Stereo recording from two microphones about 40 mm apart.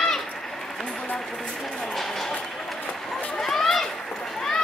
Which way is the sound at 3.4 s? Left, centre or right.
Centre.